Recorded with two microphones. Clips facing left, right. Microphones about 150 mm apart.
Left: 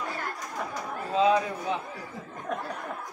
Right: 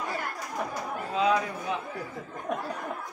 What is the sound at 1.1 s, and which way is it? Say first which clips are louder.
Speech: left 3 dB; 30° left (ahead or behind).